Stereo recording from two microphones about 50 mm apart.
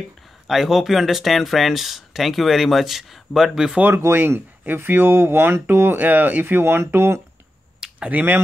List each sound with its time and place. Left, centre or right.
0.5 s speech: centre
3.9 s speech: right
8.1 s speech: right